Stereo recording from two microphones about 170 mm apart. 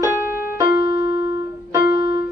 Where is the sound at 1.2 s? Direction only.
20° right (ahead or behind).